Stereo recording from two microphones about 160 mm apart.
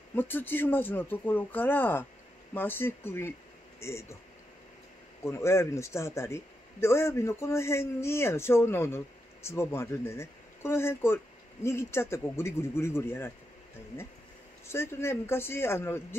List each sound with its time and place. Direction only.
0.1 s a man's voice: 10° left (ahead or behind)
5.2 s a man's voice: 15° left (ahead or behind)
14.7 s a man's voice: 15° left (ahead or behind)